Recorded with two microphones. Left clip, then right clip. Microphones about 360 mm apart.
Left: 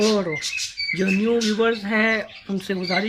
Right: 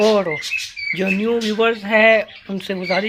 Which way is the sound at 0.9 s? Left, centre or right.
Centre.